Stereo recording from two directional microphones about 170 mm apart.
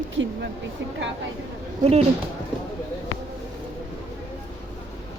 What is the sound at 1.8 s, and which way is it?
Speech, 40° right (ahead or behind).